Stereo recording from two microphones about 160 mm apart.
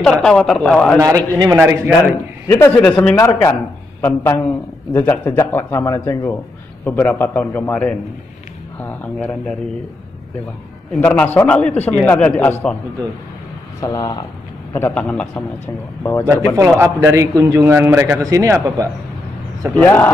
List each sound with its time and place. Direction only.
0.0 s speech: 5° left (ahead or behind)
0.9 s a man's voice: 20° right (ahead or behind)
2.4 s a man's voice: 15° left (ahead or behind)
2.8 s speech: 5° left (ahead or behind)
3.2 s a man's voice: 20° left (ahead or behind)
11.0 s a man's voice: 10° left (ahead or behind)
13.7 s a man's voice: 20° left (ahead or behind); by 15.4 s 5° left (ahead or behind)
16.0 s speech: 15° left (ahead or behind)
16.5 s a man's voice: 15° right (ahead or behind)
19.7 s a man's voice: 10° left (ahead or behind)